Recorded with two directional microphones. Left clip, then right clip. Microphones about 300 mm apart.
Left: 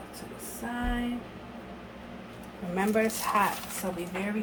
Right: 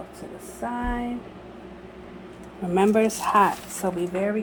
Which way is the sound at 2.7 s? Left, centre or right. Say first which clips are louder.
Right 7 dB; right.